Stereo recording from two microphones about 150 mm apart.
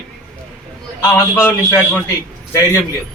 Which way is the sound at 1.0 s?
15° left (ahead or behind).